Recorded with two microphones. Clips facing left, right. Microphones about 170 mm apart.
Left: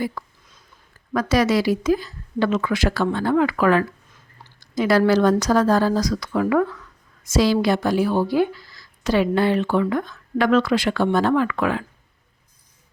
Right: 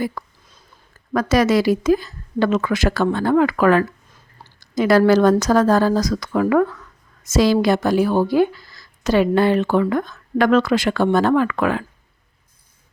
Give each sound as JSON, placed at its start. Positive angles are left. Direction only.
{"t": 0.0, "sound": "a woman's voice", "side_deg": -45}